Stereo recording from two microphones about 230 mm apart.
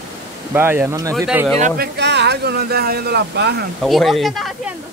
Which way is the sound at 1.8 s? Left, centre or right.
Right.